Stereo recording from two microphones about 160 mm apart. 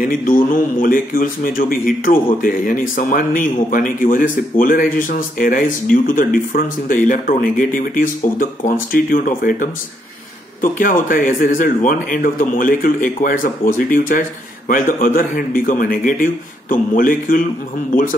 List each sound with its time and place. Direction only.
0.0 s speech: 60° left (ahead or behind)